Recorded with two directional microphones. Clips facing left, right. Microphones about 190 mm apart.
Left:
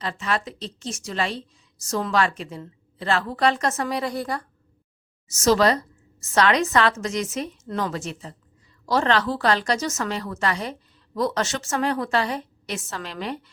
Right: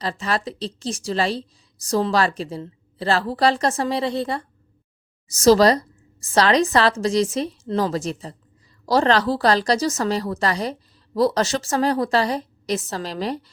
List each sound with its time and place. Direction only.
0.0 s a woman's voice: 35° right (ahead or behind)